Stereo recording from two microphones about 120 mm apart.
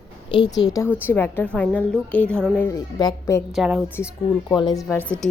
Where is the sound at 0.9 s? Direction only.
15° left (ahead or behind).